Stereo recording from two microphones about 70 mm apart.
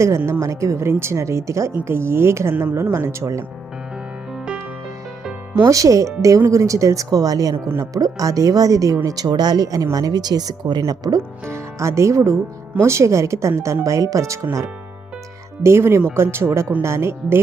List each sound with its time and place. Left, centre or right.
0.3 s speech: right
5.6 s speech: right
9.0 s speech: right
11.4 s speech: right
15.6 s speech: right